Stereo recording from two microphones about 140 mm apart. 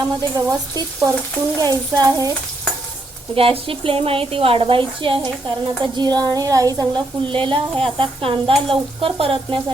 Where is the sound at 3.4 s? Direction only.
40° right (ahead or behind).